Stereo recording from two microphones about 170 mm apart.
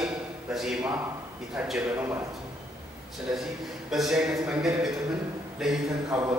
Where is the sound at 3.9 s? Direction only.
Centre (ahead or behind).